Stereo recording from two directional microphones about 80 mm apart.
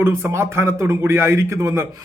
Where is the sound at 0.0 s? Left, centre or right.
Right.